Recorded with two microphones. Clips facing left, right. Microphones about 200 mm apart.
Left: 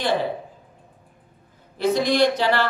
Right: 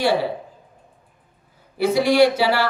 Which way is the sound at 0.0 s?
10° right (ahead or behind).